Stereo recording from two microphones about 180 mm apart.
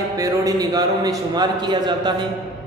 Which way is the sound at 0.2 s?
20° right (ahead or behind).